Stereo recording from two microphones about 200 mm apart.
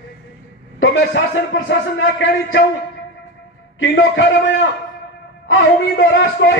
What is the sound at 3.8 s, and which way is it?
Speech, 65° left (ahead or behind).